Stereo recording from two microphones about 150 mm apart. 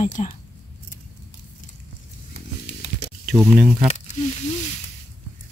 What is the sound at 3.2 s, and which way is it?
Speech, 5° right (ahead or behind).